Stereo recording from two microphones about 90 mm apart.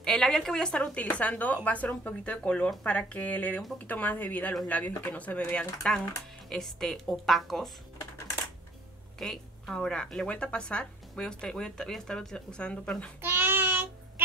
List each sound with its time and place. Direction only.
0.0 s a woman's voice: 5° left (ahead or behind)
9.2 s speech: 5° left (ahead or behind)
13.2 s child singing: 25° right (ahead or behind)